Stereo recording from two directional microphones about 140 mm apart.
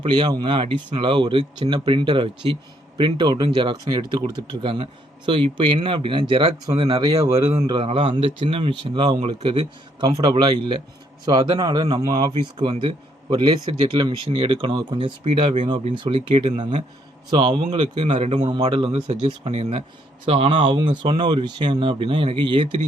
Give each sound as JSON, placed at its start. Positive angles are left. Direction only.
{"t": 0.0, "sound": "speech", "side_deg": -35}
{"t": 17.3, "sound": "speech", "side_deg": -40}
{"t": 19.2, "sound": "speech", "side_deg": -50}